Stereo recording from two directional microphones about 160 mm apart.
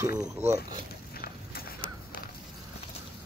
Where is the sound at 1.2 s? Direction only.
70° left (ahead or behind).